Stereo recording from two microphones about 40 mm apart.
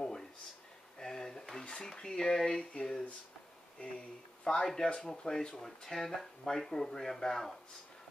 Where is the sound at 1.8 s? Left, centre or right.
Centre.